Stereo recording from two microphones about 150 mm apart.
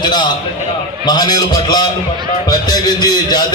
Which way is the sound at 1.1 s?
25° left (ahead or behind).